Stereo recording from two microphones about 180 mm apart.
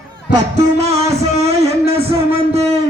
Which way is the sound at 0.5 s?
35° right (ahead or behind).